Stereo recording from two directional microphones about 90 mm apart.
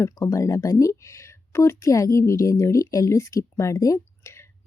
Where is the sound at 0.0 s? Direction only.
35° left (ahead or behind).